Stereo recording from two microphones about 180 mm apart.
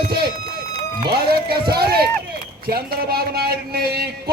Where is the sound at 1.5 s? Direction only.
25° right (ahead or behind).